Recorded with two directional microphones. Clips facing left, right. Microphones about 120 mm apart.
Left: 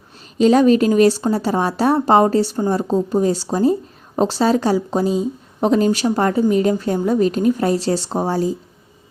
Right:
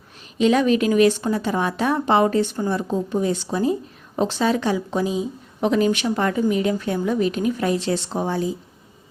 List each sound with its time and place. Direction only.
0.3 s a woman's voice: 35° left (ahead or behind)